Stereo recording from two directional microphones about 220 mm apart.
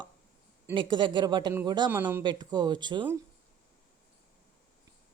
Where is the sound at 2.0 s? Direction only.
10° right (ahead or behind).